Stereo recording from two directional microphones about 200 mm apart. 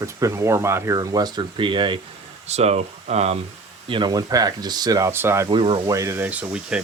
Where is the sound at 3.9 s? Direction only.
25° right (ahead or behind); by 6.8 s 5° right (ahead or behind).